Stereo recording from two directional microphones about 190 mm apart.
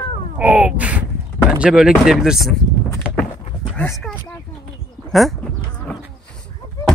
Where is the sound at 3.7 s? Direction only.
10° left (ahead or behind).